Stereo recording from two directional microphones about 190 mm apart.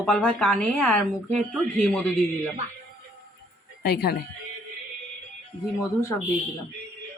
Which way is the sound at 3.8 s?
55° left (ahead or behind).